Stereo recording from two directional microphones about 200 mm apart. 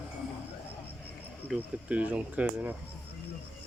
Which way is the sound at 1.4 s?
5° right (ahead or behind).